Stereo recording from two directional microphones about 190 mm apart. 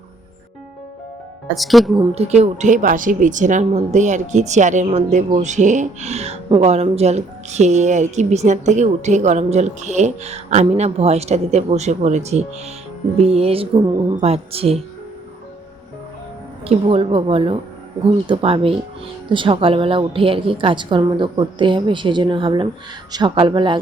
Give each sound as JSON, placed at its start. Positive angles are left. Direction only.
{"t": 1.5, "sound": "speech", "side_deg": 0}
{"t": 2.0, "sound": "speech", "side_deg": -35}
{"t": 16.6, "sound": "a woman's voice", "side_deg": -30}